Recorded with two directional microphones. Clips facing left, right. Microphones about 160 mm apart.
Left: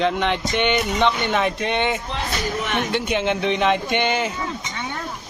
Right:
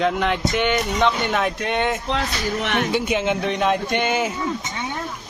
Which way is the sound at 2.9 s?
5° right (ahead or behind).